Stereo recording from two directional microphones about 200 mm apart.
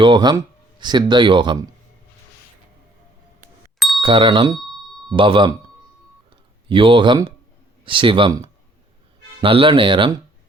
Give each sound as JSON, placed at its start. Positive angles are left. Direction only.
{"t": 0.0, "sound": "speech", "side_deg": -20}
{"t": 3.8, "sound": "bicycle bell", "side_deg": 0}
{"t": 4.0, "sound": "speech", "side_deg": -25}
{"t": 6.3, "sound": "a sound", "side_deg": -25}
{"t": 7.9, "sound": "speech", "side_deg": -25}